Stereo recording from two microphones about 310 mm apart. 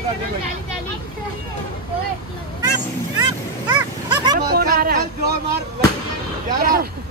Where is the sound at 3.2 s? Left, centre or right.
Centre.